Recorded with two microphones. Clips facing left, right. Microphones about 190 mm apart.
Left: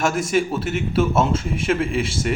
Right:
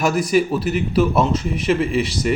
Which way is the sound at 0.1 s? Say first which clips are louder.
Right 3 dB; 5° right (ahead or behind).